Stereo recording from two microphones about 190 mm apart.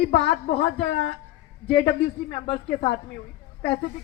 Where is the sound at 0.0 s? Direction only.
30° left (ahead or behind).